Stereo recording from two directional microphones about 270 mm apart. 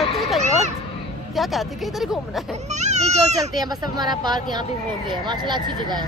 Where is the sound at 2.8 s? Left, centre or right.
Right.